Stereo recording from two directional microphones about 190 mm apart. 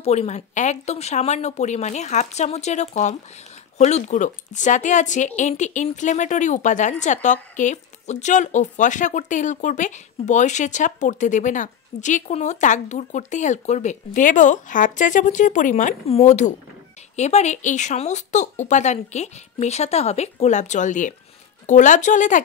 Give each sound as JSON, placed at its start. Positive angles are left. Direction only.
{"t": 0.0, "sound": "a woman's voice", "side_deg": 35}